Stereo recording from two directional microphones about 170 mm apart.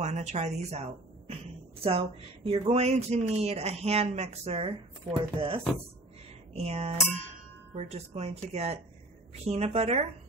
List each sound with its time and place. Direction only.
0.0 s a woman's voice: 40° right (ahead or behind)